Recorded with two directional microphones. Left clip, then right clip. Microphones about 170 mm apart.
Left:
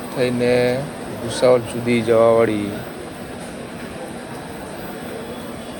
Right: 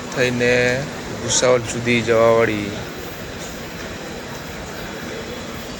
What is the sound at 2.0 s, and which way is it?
Speech, 20° left (ahead or behind).